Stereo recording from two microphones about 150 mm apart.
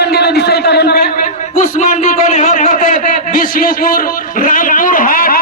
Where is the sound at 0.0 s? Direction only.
90° left.